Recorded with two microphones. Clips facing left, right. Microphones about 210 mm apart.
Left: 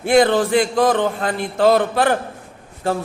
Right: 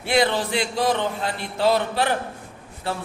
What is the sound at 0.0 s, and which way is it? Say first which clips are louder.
Speech: left 7 dB; 50° left (ahead or behind).